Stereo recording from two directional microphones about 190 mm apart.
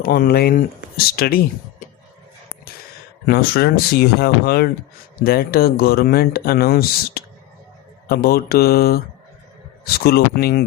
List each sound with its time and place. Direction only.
0.0 s speech: 50° left (ahead or behind)
3.2 s speech: 55° left (ahead or behind)